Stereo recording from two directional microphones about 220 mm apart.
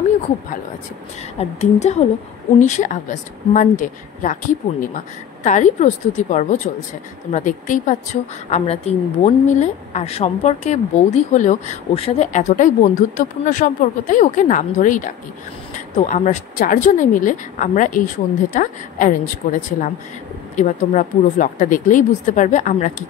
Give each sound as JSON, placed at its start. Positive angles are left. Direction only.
{"t": 1.4, "sound": "a woman's voice", "side_deg": 30}
{"t": 5.4, "sound": "a woman's voice", "side_deg": 35}
{"t": 20.5, "sound": "a woman's voice", "side_deg": 35}